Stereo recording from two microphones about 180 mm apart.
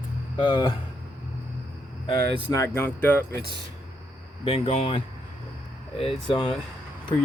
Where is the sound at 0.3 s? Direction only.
30° left (ahead or behind).